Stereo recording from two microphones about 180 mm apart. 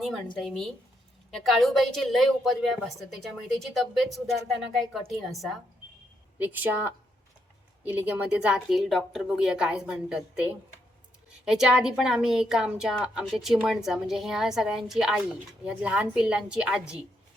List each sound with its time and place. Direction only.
0.3 s a woman's voice: centre (ahead or behind)
6.4 s a woman's voice: 10° right (ahead or behind)
11.4 s a woman's voice: 5° right (ahead or behind)